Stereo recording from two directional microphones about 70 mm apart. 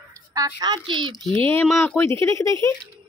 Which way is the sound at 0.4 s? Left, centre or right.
Right.